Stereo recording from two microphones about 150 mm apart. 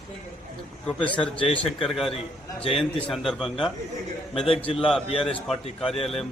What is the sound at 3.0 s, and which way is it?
Speech, centre (ahead or behind).